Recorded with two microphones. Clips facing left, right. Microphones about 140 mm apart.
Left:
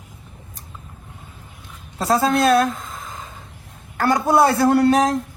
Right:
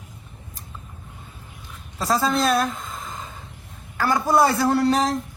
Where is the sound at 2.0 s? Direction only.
55° left (ahead or behind).